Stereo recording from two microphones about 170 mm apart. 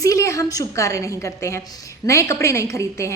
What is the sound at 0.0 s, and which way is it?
A woman's voice, 20° left (ahead or behind).